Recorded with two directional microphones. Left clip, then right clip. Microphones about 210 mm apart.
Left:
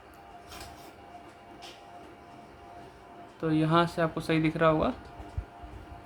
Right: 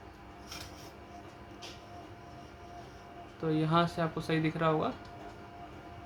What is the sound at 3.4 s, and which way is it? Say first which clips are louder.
Speech: left 4 dB; 20° left (ahead or behind).